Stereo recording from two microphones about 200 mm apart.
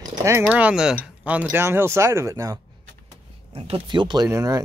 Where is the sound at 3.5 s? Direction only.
25° right (ahead or behind).